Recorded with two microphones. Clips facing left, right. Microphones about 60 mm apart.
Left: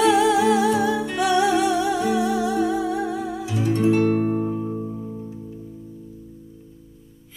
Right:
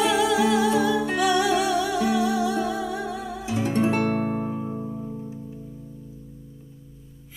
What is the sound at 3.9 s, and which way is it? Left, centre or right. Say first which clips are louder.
Music: left 5 dB; right.